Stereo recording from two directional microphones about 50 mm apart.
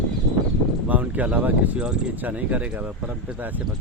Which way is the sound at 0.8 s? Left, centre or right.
Right.